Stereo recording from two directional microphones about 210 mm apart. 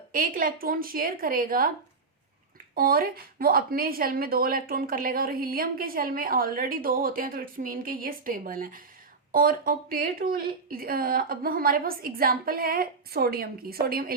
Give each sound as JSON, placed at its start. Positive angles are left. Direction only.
{"t": 0.1, "sound": "a woman's voice", "side_deg": -40}
{"t": 2.7, "sound": "a woman's voice", "side_deg": -45}